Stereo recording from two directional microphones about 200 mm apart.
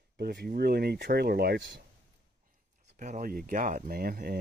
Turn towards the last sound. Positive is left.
turn(degrees=-50)  # may be behind; listen again after turning